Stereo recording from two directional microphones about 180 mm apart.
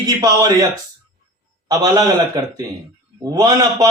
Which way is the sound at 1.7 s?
20° right (ahead or behind).